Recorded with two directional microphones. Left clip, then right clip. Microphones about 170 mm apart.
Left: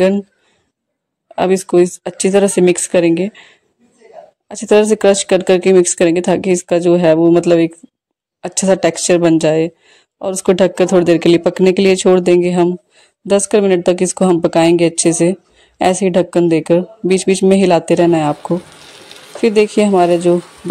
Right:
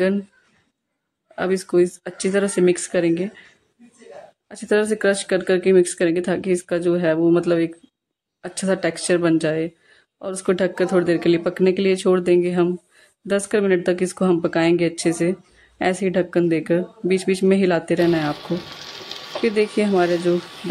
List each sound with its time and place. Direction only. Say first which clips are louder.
1.3 s speech: left 8 dB; 35° left (ahead or behind)
4.5 s speech: left 9 dB; 30° left (ahead or behind)
19.4 s speech: left 8 dB; 30° left (ahead or behind)